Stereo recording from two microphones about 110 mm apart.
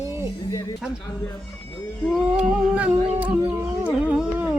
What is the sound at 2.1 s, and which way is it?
Howl, 5° right (ahead or behind).